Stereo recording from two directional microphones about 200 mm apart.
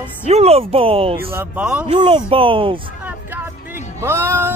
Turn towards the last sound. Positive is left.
turn(degrees=-10)  # may be behind; listen again after turning